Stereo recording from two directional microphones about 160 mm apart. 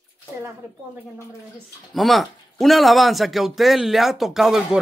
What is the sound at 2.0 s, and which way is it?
Speech, centre (ahead or behind).